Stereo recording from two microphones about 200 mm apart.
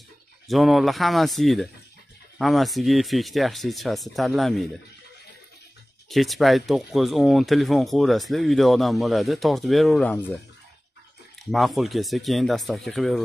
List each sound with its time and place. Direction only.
0.5 s speech: centre (ahead or behind)
6.0 s speech: centre (ahead or behind)
11.5 s speech: centre (ahead or behind)